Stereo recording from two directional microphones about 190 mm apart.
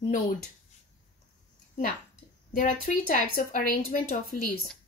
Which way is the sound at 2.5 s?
45° left (ahead or behind).